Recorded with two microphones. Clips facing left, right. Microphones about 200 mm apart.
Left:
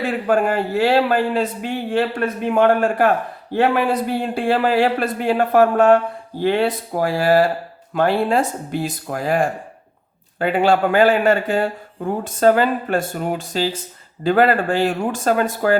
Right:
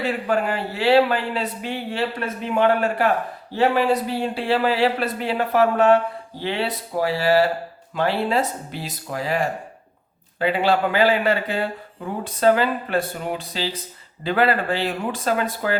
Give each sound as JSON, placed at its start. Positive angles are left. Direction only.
{"t": 0.0, "sound": "speech", "side_deg": 45}